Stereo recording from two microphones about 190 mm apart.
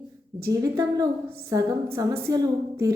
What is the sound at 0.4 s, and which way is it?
A woman's voice, 15° right (ahead or behind).